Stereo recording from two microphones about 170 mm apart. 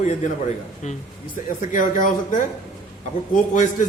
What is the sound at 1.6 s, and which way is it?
Speech, 50° left (ahead or behind).